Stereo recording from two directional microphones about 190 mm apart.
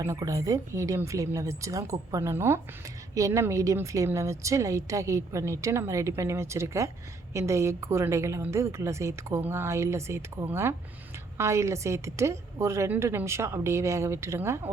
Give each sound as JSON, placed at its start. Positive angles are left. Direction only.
{"t": 0.0, "sound": "speech", "side_deg": -15}